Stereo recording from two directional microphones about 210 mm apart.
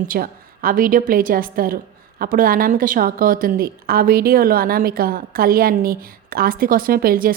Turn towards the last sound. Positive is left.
turn(degrees=-45)  # may be behind; listen again after turning